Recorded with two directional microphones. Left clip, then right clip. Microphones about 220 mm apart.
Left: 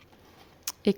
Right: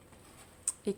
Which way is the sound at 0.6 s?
35° left (ahead or behind).